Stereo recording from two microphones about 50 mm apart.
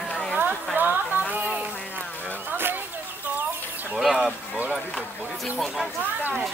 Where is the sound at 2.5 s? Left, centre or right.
Right.